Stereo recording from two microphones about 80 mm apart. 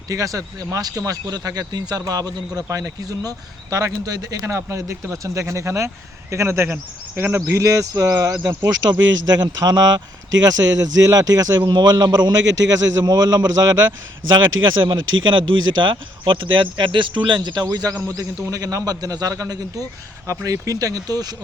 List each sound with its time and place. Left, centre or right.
0.1 s a man's voice: right
2.6 s speech: right
7.5 s speech: right
8.6 s a man's voice: right
11.6 s a man's voice: right
14.3 s speech: right
18.1 s speech: right